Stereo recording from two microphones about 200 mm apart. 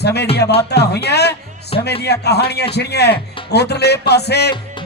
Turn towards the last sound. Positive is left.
turn(degrees=55)  # may be behind; listen again after turning